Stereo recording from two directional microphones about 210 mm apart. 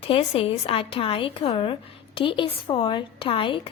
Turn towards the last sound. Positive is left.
turn(degrees=25)  # may be behind; listen again after turning